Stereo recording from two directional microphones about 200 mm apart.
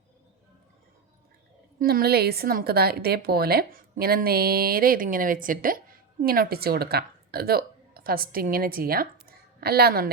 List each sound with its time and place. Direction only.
1.8 s a woman's voice: 50° right (ahead or behind)